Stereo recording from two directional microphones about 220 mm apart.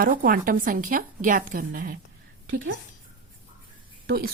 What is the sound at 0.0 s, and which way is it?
A woman's voice, 40° right (ahead or behind).